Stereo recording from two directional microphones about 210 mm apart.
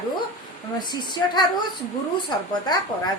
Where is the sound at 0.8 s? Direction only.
20° left (ahead or behind).